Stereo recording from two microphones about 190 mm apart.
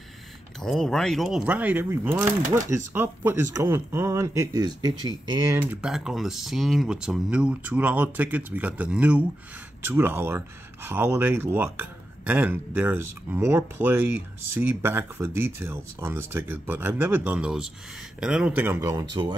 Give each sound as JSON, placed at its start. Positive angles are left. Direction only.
{"t": 0.6, "sound": "speech", "side_deg": 0}
{"t": 5.6, "sound": "speech", "side_deg": -5}